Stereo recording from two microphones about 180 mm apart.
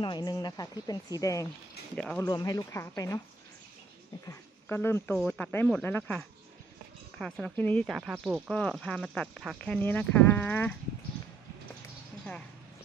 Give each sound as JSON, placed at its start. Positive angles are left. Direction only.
{"t": 0.0, "sound": "speech", "side_deg": 25}
{"t": 2.0, "sound": "speech", "side_deg": 5}
{"t": 2.2, "sound": "speech", "side_deg": 20}
{"t": 4.3, "sound": "speech", "side_deg": 10}
{"t": 7.8, "sound": "speech", "side_deg": 0}